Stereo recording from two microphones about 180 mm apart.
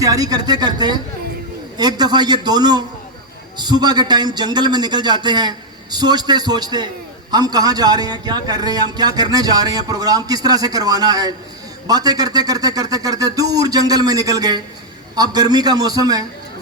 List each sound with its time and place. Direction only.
0.0 s a man's voice: 20° right (ahead or behind)